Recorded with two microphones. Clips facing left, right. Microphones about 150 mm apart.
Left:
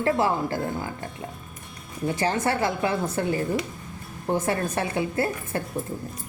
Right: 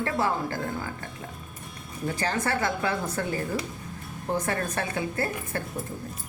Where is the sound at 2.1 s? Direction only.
25° left (ahead or behind).